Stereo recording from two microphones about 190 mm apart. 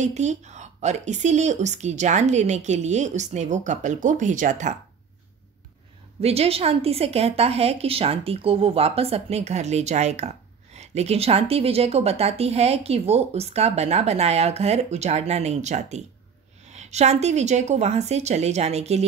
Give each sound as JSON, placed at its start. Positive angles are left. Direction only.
{"t": 0.0, "sound": "a woman's voice", "side_deg": -35}
{"t": 6.2, "sound": "a woman's voice", "side_deg": -30}